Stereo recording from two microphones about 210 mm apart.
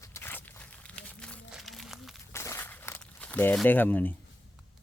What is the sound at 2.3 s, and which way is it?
Crumpling, 10° left (ahead or behind).